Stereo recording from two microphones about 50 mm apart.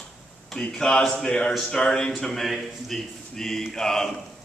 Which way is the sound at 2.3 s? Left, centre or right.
Centre.